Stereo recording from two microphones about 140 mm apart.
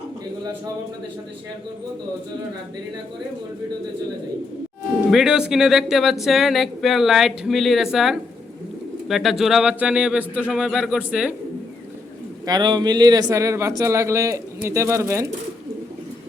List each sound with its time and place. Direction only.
5.1 s speech: 5° right (ahead or behind)
12.5 s speech: 30° right (ahead or behind)